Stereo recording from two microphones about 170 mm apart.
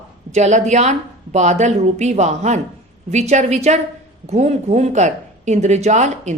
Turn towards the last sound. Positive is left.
turn(degrees=-45)  # may be behind; listen again after turning